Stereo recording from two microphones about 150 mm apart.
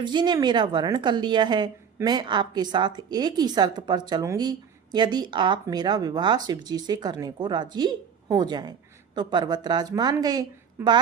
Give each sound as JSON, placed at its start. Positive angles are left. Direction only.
{"t": 0.0, "sound": "a woman's voice", "side_deg": -30}